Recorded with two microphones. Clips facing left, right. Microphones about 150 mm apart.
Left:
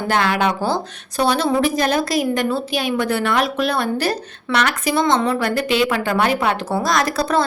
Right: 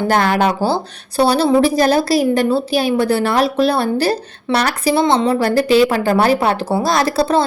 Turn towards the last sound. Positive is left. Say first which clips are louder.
# right 4 dB
turn(degrees=-30)  # may be behind; listen again after turning